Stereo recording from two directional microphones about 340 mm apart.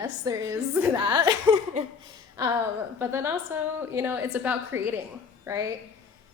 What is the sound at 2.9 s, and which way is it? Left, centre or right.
A woman's voice, centre.